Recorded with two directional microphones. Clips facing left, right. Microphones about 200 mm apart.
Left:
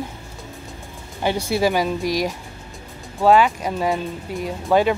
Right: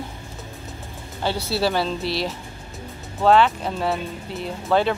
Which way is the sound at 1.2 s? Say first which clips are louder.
Left 3 dB; 15° left (ahead or behind).